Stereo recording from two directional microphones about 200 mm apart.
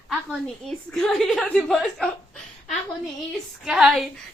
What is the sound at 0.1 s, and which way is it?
A woman's voice, centre (ahead or behind).